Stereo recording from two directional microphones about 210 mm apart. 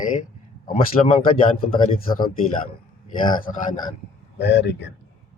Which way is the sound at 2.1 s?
45° left (ahead or behind).